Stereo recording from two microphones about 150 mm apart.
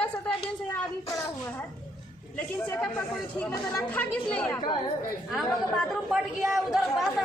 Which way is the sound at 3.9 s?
10° left (ahead or behind).